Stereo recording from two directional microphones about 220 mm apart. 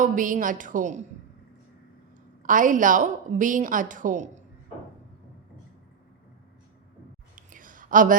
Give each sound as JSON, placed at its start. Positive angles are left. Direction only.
{"t": 0.0, "sound": "a woman's voice", "side_deg": -35}
{"t": 2.4, "sound": "a woman's voice", "side_deg": -35}
{"t": 7.3, "sound": "a sound", "side_deg": -35}